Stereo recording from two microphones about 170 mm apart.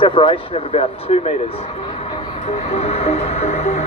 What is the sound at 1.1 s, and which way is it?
Speech, 40° left (ahead or behind).